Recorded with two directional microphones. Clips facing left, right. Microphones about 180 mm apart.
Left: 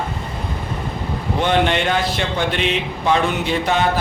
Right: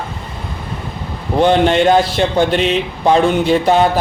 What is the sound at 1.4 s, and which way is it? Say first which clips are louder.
A man's voice: right 7 dB; 35° right (ahead or behind).